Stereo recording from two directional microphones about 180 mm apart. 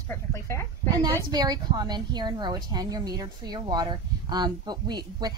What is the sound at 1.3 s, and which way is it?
A woman's voice, 20° right (ahead or behind).